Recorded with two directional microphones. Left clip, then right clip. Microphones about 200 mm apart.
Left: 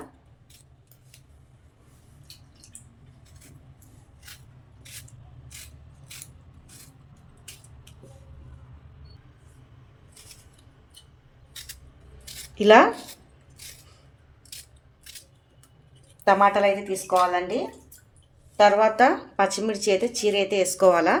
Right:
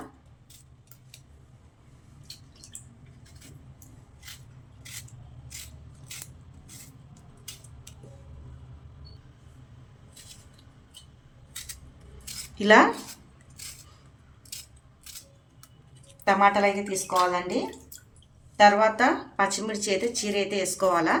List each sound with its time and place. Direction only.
12.5 s speech: 20° left (ahead or behind)
16.2 s speech: 25° left (ahead or behind)